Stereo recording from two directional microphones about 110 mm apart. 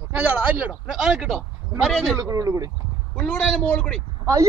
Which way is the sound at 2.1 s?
25° right (ahead or behind).